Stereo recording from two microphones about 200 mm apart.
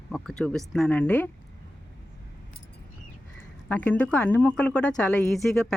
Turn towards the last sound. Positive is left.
turn(degrees=5)  # may be behind; listen again after turning